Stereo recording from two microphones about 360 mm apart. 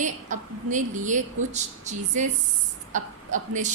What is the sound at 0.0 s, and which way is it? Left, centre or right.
A woman's voice, right.